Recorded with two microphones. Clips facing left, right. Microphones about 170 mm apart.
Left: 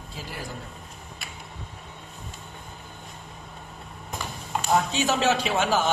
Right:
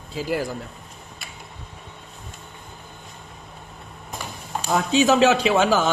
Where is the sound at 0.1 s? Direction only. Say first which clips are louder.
Right 13 dB; 90° right.